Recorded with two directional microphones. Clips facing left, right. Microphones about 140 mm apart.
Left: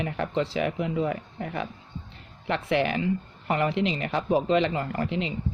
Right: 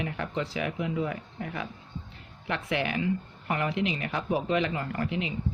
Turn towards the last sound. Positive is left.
turn(degrees=30)  # may be behind; listen again after turning